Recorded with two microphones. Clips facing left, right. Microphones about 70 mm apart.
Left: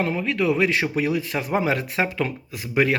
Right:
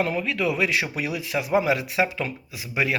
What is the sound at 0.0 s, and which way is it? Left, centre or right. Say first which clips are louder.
Speech: left 2 dB; left.